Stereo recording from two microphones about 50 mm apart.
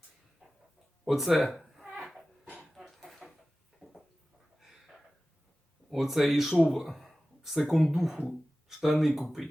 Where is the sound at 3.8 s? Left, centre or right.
Centre.